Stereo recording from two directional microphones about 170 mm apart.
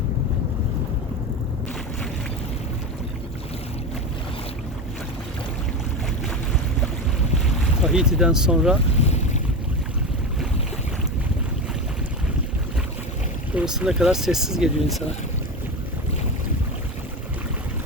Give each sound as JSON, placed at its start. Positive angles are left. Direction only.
{"t": 7.4, "sound": "speech", "side_deg": 0}
{"t": 9.0, "sound": "boat", "side_deg": 40}
{"t": 13.5, "sound": "speech", "side_deg": -5}